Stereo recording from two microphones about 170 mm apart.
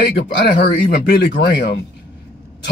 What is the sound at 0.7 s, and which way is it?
Speech, 75° left (ahead or behind).